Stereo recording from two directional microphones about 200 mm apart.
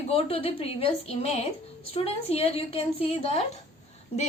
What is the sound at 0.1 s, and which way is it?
A woman's voice, 30° left (ahead or behind).